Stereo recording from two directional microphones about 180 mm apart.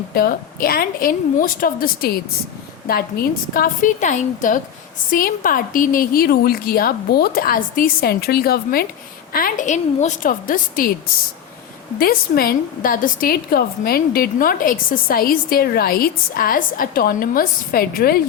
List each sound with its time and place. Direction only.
0.1 s a woman's voice: 55° left (ahead or behind)
11.9 s a woman's voice: 55° left (ahead or behind)